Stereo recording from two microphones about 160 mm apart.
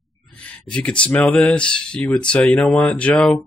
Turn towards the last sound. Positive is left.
turn(degrees=5)  # may be behind; listen again after turning